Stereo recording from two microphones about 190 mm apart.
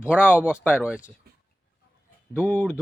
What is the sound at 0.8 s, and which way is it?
Speech, 5° right (ahead or behind).